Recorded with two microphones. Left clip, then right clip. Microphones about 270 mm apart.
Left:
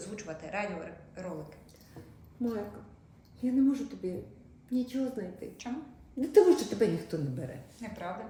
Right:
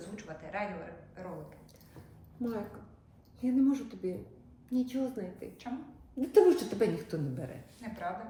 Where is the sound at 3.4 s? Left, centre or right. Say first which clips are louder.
Left 1 dB; centre.